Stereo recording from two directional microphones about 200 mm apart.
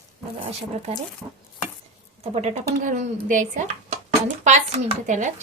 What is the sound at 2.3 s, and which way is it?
Speech, 35° right (ahead or behind).